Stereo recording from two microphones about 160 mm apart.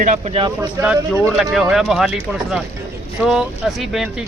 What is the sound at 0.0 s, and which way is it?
Speech, 45° right (ahead or behind).